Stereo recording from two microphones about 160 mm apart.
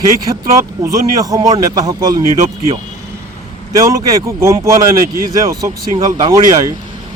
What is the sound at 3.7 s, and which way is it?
Speech, 20° right (ahead or behind).